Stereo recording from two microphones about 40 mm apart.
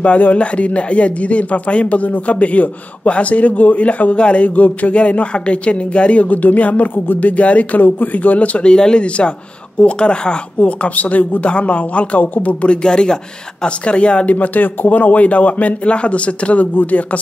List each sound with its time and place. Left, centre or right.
0.0 s speech: left
6.2 s speech: left
8.6 s speech: left
10.6 s speech: left
12.6 s speech: left
14.3 s speech: left